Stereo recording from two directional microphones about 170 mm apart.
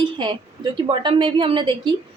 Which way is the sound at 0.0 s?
30° right (ahead or behind).